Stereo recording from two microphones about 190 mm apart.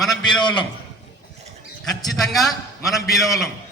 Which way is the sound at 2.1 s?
Centre (ahead or behind).